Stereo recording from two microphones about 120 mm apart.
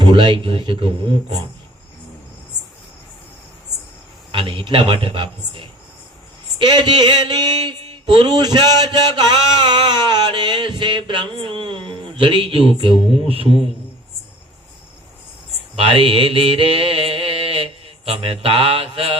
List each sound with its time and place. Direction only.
0.0 s speech: 40° right (ahead or behind)
4.3 s a man's voice: 45° right (ahead or behind)
6.6 s a sound: 35° right (ahead or behind)
12.8 s a man's voice: 50° right (ahead or behind)
15.7 s mantra: 55° right (ahead or behind)